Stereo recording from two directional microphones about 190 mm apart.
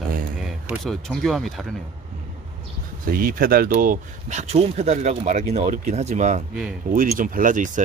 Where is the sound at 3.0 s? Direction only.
50° right (ahead or behind).